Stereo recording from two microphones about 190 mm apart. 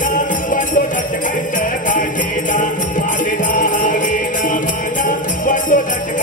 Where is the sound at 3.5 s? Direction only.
45° left (ahead or behind).